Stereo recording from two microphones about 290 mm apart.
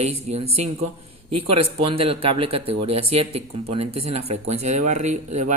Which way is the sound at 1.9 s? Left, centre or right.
Centre.